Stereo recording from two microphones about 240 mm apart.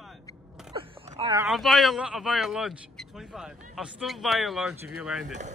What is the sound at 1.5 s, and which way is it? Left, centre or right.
Speech, centre.